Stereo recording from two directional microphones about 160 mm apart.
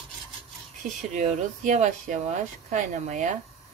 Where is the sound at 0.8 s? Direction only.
50° right (ahead or behind).